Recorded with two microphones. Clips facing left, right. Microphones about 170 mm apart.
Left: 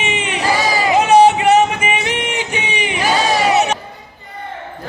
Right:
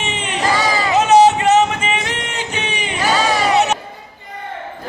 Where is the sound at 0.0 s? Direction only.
10° left (ahead or behind).